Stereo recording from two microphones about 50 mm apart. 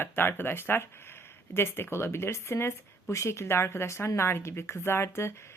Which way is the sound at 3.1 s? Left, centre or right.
Left.